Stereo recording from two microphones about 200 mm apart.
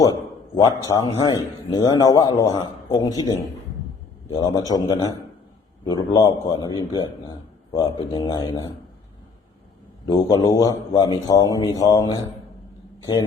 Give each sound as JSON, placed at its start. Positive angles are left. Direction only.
{"t": 0.5, "sound": "a man's voice", "side_deg": 20}
{"t": 4.4, "sound": "a man's voice", "side_deg": 20}
{"t": 10.1, "sound": "a man's voice", "side_deg": 20}